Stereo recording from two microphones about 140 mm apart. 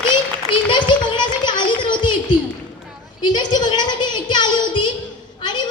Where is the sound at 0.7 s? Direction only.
35° left (ahead or behind).